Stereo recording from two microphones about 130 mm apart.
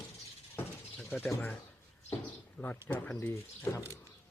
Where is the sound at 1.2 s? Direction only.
15° left (ahead or behind).